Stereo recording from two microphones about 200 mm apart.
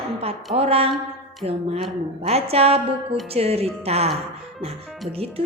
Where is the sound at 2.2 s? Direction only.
30° right (ahead or behind).